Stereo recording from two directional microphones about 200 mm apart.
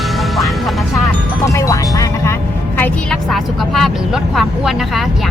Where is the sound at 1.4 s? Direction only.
15° left (ahead or behind).